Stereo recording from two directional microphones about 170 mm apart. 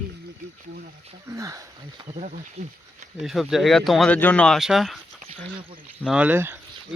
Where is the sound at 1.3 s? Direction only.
20° right (ahead or behind).